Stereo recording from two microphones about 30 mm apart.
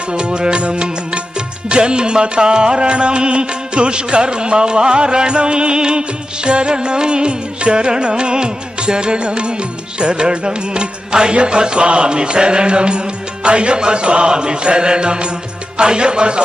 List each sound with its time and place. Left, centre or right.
0.1 s music: right